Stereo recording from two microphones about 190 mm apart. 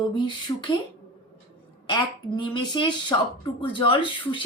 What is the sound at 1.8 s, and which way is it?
A woman's voice, 25° left (ahead or behind).